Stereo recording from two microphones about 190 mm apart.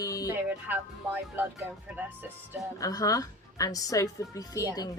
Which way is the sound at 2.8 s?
20° left (ahead or behind).